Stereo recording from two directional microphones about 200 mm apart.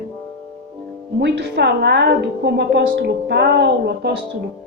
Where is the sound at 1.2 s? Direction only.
60° right (ahead or behind).